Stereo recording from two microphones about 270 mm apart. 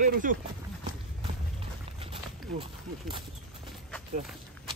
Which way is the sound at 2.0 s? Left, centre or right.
Right.